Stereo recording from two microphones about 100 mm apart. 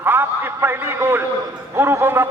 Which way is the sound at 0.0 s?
20° right (ahead or behind).